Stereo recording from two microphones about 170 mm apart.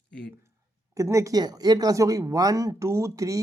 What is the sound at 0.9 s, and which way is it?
Speech, 15° right (ahead or behind).